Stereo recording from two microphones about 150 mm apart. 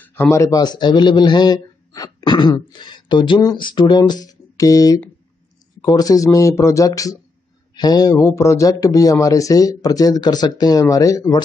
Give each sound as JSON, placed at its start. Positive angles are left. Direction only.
{"t": 0.0, "sound": "speech", "side_deg": 15}